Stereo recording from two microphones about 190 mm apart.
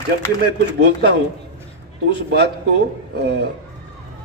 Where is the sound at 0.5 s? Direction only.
60° right (ahead or behind).